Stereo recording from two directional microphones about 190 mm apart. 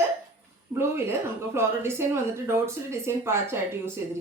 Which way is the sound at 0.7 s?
15° right (ahead or behind).